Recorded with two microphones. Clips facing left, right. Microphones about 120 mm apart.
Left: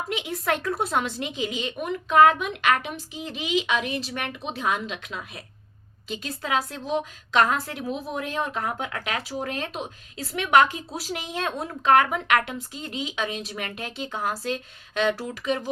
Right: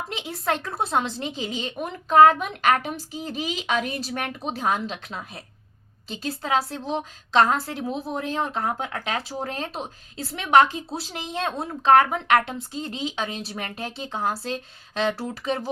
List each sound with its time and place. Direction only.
0.1 s a woman's voice: 30° right (ahead or behind)